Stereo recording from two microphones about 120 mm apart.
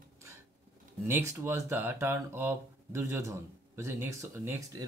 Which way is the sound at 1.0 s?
20° right (ahead or behind).